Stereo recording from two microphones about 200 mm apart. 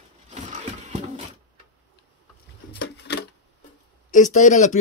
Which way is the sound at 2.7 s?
55° left (ahead or behind).